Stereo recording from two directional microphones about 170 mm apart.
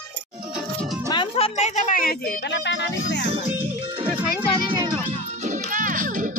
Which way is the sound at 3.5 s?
10° right (ahead or behind).